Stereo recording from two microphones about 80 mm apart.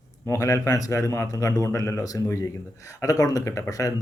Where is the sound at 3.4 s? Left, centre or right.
Left.